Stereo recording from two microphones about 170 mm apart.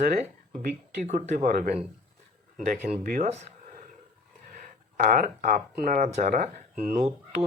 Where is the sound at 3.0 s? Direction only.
50° right (ahead or behind).